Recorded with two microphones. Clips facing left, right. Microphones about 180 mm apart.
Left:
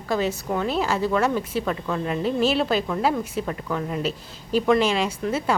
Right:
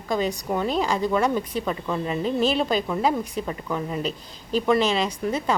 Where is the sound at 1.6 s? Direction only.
5° right (ahead or behind).